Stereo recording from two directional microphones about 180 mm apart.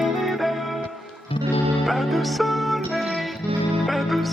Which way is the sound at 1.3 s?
30° left (ahead or behind).